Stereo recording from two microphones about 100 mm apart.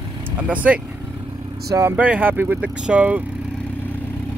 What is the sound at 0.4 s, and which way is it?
Speech, 15° right (ahead or behind).